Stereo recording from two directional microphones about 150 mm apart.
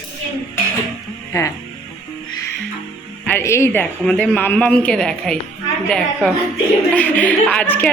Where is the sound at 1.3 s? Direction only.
20° left (ahead or behind).